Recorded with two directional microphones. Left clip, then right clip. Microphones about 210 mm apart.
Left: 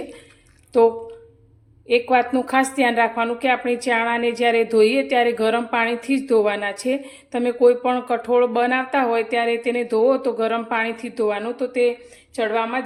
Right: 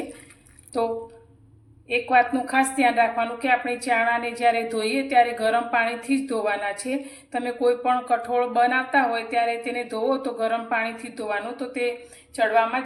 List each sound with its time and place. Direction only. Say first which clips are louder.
1.9 s a woman's voice: left 2 dB; 45° left (ahead or behind)